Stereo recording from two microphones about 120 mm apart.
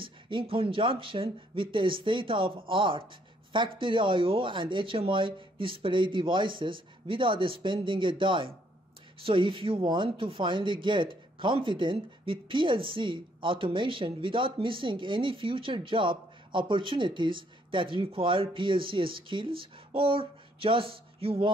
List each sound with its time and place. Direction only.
0.0 s speech: 45° right (ahead or behind)